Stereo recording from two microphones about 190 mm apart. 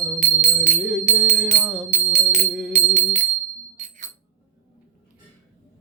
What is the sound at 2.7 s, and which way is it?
Music, 35° right (ahead or behind).